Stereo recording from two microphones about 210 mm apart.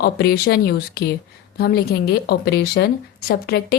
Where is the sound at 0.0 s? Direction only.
50° left (ahead or behind).